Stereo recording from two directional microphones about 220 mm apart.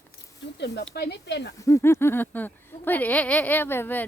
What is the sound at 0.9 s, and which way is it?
Speech, 50° left (ahead or behind).